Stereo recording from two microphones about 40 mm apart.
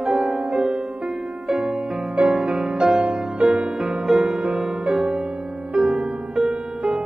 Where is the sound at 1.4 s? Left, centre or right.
Centre.